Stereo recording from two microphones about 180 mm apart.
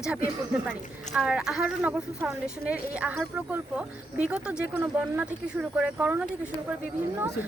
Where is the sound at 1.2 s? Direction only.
5° right (ahead or behind).